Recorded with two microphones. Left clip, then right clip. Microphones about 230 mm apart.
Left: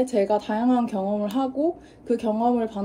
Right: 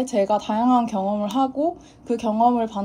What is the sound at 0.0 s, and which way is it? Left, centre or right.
Speech, centre.